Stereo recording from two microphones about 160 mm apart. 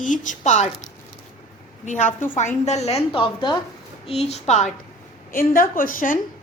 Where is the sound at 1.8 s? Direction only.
50° left (ahead or behind).